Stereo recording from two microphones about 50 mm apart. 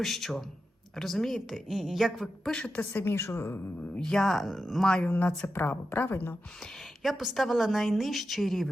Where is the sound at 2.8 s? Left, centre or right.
Left.